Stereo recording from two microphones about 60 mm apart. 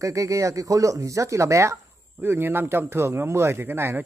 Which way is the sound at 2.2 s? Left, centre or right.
Right.